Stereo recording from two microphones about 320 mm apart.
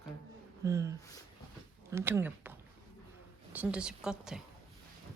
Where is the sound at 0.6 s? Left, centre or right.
Centre.